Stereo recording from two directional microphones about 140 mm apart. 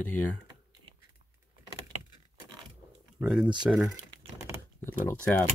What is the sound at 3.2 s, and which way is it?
Speech, 5° right (ahead or behind).